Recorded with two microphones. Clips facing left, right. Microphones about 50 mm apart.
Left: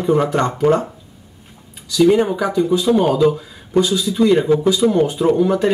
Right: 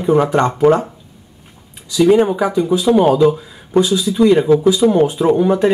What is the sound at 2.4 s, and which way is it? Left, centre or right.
Speech, centre.